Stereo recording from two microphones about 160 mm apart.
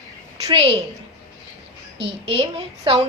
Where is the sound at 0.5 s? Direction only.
35° right (ahead or behind).